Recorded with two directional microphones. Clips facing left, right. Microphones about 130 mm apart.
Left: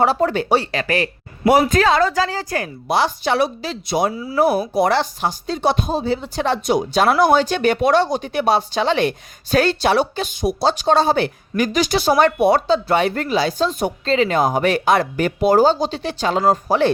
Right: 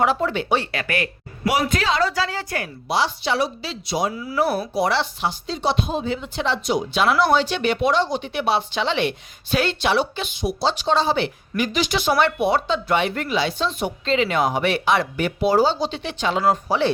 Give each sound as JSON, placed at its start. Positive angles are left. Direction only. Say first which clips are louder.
{"t": 0.0, "sound": "speech", "louder": "left 4 dB", "side_deg": 40}
{"t": 1.5, "sound": "speech", "louder": "left 7 dB", "side_deg": 45}
{"t": 2.9, "sound": "speech", "louder": "left 4 dB", "side_deg": 55}
{"t": 4.1, "sound": "speech", "louder": "left 3 dB", "side_deg": 25}
{"t": 4.4, "sound": "speech", "louder": "left 5 dB", "side_deg": 15}
{"t": 4.7, "sound": "speech", "louder": "left 4 dB", "side_deg": 50}